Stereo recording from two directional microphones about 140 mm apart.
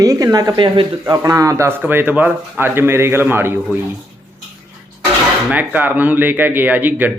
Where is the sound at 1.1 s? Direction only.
25° right (ahead or behind).